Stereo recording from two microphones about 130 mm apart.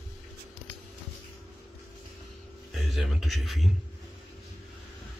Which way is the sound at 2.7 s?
Centre (ahead or behind).